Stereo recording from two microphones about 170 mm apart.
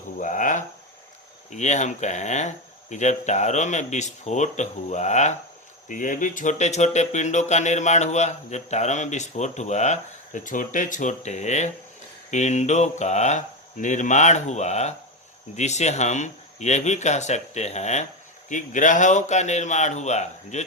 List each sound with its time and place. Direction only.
0.2 s speech: 50° left (ahead or behind)